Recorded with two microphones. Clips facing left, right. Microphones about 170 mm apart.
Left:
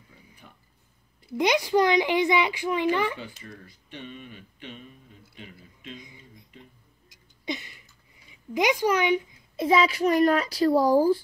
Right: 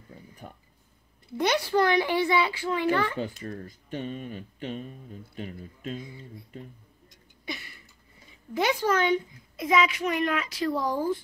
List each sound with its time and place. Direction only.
0.4 s a sound: 40° right (ahead or behind)
1.3 s speech: 15° left (ahead or behind)
3.2 s speech: 45° right (ahead or behind)
5.9 s speech: 15° left (ahead or behind)
6.5 s speech: 45° right (ahead or behind)
7.4 s a sound: 20° left (ahead or behind)
8.5 s speech: 15° left (ahead or behind)
9.6 s speech: 30° left (ahead or behind)